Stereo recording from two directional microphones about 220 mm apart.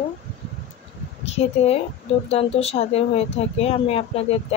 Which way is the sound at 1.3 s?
30° left (ahead or behind).